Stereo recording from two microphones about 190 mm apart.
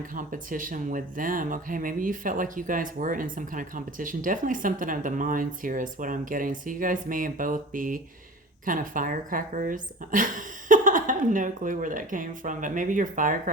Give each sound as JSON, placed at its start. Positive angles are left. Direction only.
{"t": 0.1, "sound": "speech", "side_deg": -45}